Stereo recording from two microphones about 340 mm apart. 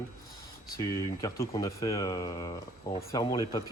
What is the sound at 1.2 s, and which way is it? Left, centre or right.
Speech, centre.